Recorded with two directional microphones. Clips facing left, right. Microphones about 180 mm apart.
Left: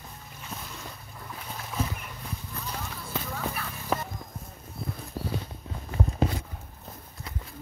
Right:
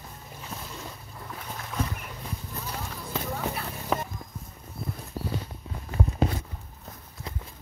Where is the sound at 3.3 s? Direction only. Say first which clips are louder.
Right 2 dB; 25° right (ahead or behind).